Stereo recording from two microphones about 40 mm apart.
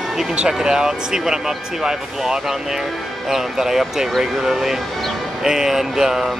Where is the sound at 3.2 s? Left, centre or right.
Centre.